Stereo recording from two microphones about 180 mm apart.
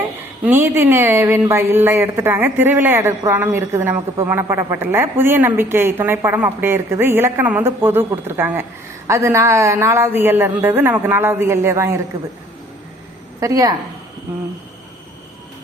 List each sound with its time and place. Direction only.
0.4 s speech: 10° right (ahead or behind)
13.4 s a woman's voice: 20° right (ahead or behind)